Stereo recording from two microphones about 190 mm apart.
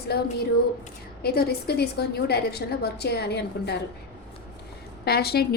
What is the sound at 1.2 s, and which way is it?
A woman's voice, 55° left (ahead or behind).